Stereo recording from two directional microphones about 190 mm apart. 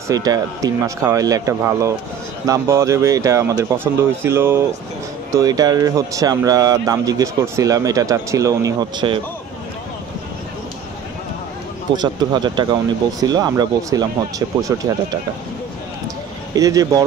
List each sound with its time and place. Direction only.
0.1 s speech: 20° right (ahead or behind)
11.9 s speech: 20° right (ahead or behind)
16.5 s speech: 20° right (ahead or behind)